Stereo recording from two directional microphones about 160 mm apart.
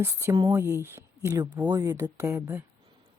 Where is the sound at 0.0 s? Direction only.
15° right (ahead or behind).